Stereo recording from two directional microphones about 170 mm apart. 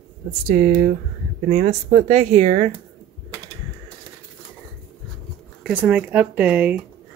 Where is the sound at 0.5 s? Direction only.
55° right (ahead or behind).